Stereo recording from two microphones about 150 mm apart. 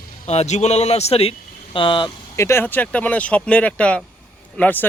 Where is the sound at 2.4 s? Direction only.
15° left (ahead or behind).